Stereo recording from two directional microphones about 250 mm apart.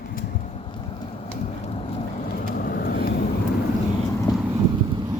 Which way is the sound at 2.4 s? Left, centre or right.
Left.